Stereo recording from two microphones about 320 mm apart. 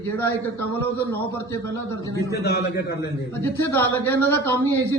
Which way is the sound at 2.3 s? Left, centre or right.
Left.